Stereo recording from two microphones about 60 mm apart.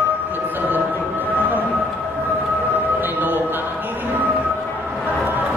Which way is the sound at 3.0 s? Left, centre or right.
Right.